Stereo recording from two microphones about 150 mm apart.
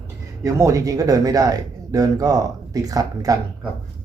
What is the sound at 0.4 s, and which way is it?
Speech, 20° right (ahead or behind).